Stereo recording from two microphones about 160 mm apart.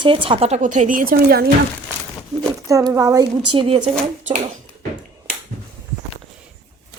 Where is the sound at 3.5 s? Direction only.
30° right (ahead or behind).